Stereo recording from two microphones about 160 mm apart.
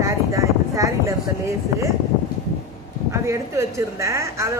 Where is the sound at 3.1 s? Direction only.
20° right (ahead or behind).